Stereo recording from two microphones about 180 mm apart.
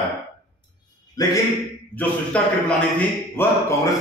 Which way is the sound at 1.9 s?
10° left (ahead or behind).